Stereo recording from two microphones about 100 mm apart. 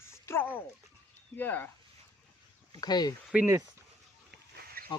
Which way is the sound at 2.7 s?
45° left (ahead or behind).